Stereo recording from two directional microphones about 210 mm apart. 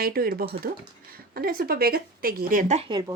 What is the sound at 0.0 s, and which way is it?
Speech, 45° right (ahead or behind).